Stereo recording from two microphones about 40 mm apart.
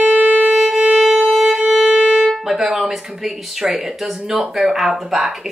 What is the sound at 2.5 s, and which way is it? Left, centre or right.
Speech, centre.